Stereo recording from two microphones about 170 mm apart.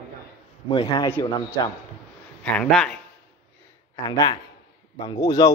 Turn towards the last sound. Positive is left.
turn(degrees=20)  # may be behind; listen again after turning